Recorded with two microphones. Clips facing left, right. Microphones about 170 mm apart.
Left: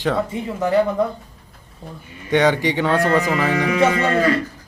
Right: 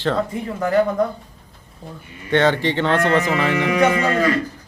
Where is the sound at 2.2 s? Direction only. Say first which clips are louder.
Even; 15° left (ahead or behind).